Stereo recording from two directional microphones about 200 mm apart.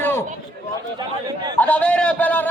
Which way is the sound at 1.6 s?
5° left (ahead or behind).